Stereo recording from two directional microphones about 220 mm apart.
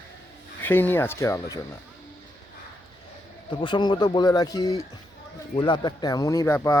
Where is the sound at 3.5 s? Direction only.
20° left (ahead or behind).